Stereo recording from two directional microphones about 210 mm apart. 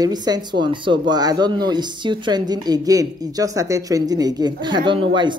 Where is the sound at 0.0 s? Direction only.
20° right (ahead or behind).